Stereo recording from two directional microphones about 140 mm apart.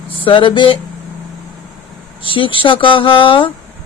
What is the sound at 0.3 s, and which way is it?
Speech, 40° left (ahead or behind).